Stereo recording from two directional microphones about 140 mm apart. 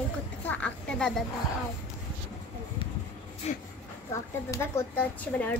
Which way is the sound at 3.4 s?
50° left (ahead or behind).